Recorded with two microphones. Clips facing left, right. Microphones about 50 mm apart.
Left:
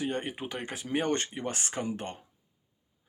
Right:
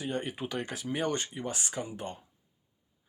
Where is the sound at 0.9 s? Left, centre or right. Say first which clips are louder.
Left 3 dB; left.